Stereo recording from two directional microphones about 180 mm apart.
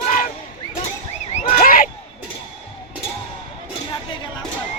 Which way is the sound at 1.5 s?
55° left (ahead or behind).